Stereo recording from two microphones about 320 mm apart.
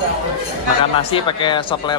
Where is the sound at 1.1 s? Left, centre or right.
Centre.